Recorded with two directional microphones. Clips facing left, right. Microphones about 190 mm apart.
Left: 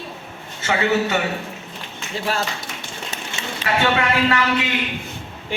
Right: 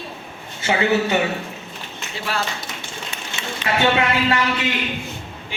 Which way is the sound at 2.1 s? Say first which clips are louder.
Left 3 dB; 45° left (ahead or behind).